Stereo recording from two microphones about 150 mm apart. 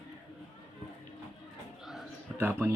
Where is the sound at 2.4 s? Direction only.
15° right (ahead or behind).